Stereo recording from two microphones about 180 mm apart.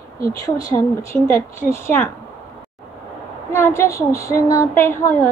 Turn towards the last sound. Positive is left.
turn(degrees=15)  # may be behind; listen again after turning